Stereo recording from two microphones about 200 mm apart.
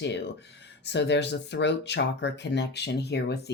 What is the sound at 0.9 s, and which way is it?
Speech, 60° left (ahead or behind).